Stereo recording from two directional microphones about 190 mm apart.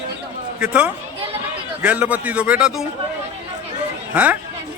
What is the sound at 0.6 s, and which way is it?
A man's voice, 5° right (ahead or behind).